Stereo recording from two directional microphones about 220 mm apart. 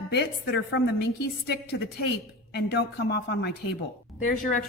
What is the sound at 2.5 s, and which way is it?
A woman's voice, 50° left (ahead or behind).